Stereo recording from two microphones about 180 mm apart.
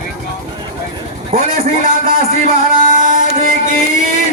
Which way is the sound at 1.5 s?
55° right (ahead or behind).